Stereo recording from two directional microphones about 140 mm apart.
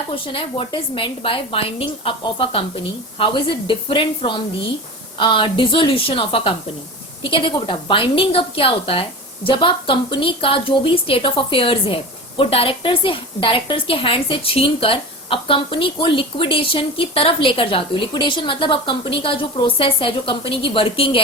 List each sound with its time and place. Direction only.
0.3 s a woman's voice: 40° left (ahead or behind)